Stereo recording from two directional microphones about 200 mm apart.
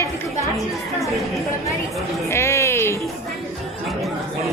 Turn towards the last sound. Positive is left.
turn(degrees=10)  # may be behind; listen again after turning